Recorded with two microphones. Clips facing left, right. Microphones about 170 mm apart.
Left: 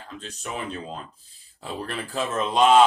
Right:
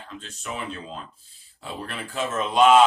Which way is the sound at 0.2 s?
35° left (ahead or behind).